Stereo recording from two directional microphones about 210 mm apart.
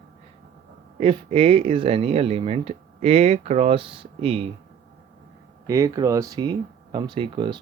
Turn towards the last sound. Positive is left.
turn(degrees=-20)  # may be behind; listen again after turning